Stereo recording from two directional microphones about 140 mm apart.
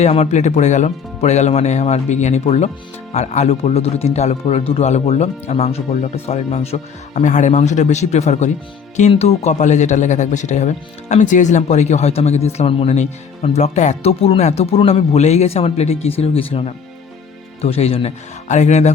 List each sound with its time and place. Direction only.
0.0 s speech: 50° left (ahead or behind)